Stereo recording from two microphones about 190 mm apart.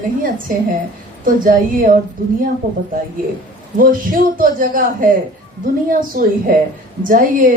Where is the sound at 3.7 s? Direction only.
45° right (ahead or behind).